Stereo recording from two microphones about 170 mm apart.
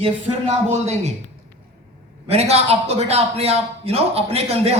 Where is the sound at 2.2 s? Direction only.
40° right (ahead or behind).